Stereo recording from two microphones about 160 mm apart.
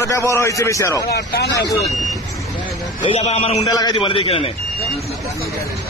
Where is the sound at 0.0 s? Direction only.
20° left (ahead or behind).